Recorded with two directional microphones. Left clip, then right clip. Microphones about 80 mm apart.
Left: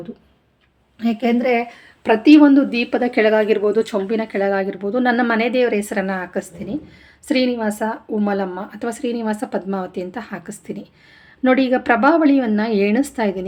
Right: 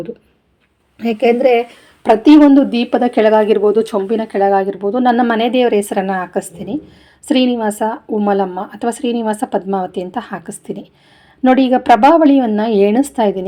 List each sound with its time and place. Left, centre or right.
0.9 s a woman's voice: right
2.0 s a woman's voice: right
3.2 s speech: right; by 5.4 s centre
5.4 s a woman's voice: right